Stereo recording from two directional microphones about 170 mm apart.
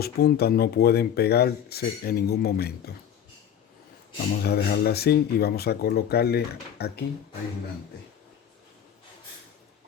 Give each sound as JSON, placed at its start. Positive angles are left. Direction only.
{"t": 0.0, "sound": "speech", "side_deg": 65}
{"t": 4.4, "sound": "speech", "side_deg": 70}